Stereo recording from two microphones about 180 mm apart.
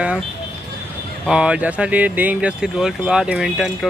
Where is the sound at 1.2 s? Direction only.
5° right (ahead or behind).